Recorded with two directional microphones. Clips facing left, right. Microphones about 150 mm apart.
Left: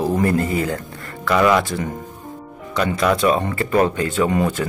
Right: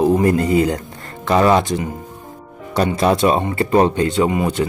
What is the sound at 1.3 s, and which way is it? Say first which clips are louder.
Speech: right 2 dB; 30° right (ahead or behind).